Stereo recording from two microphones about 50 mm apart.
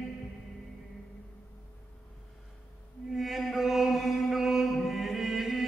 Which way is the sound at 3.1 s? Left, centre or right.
Centre.